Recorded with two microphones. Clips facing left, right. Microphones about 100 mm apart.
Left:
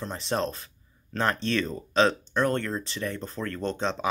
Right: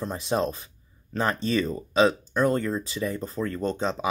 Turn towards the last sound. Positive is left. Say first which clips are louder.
# right 2 dB
turn(degrees=-5)  # may be behind; listen again after turning